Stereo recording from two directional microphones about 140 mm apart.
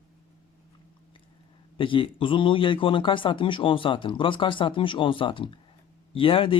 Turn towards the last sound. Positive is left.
turn(degrees=40)  # may be behind; listen again after turning